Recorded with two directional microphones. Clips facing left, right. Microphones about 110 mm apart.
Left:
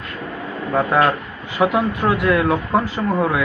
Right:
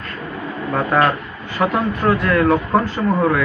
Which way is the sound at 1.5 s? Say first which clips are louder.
Left 1 dB; 10° left (ahead or behind).